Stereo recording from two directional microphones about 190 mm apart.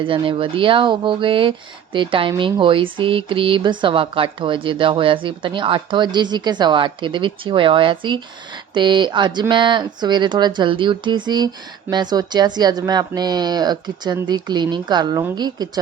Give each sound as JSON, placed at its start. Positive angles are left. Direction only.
{"t": 0.0, "sound": "speech", "side_deg": -30}